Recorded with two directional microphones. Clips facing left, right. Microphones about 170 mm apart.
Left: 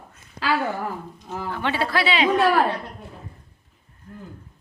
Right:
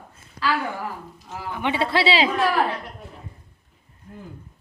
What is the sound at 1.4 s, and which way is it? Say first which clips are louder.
Speech: right 1 dB; 15° right (ahead or behind).